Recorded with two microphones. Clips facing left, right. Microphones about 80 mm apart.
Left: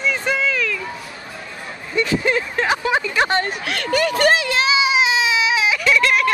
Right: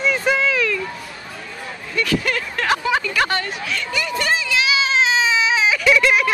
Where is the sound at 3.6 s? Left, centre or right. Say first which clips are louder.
Left 5 dB; left.